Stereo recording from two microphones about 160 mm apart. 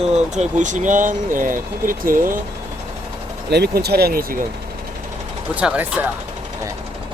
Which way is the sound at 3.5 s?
90° right.